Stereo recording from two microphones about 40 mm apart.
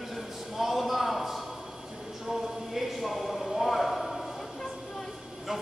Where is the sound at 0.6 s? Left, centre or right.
Centre.